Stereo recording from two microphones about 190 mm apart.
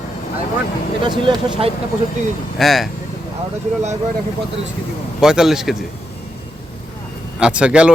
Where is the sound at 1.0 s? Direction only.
25° right (ahead or behind).